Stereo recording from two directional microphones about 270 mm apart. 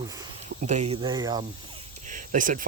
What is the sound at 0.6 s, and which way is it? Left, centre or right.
Speech, right.